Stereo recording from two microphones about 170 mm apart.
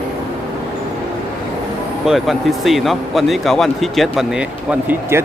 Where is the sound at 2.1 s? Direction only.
Centre (ahead or behind).